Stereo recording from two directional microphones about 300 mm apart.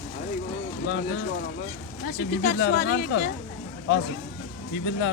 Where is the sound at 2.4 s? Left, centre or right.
Left.